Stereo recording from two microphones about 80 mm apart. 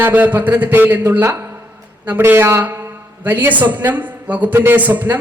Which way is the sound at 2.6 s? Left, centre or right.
Right.